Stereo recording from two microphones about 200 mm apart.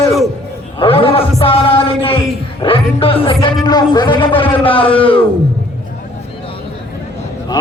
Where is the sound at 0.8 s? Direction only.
30° left (ahead or behind).